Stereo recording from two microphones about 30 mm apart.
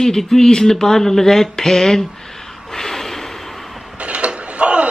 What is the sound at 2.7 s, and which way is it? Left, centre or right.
Snort, centre.